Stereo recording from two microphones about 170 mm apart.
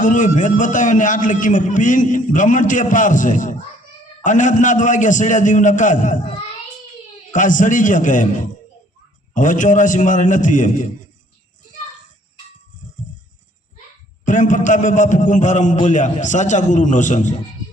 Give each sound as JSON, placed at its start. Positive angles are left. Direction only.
{"t": 0.0, "sound": "a man's voice", "side_deg": 50}
{"t": 7.3, "sound": "a man's voice", "side_deg": 50}
{"t": 14.3, "sound": "a man's voice", "side_deg": 50}